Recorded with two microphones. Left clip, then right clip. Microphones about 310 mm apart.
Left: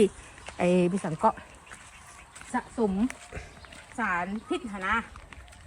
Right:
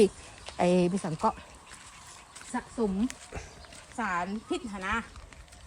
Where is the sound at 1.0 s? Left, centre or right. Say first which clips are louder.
Left 4 dB; centre.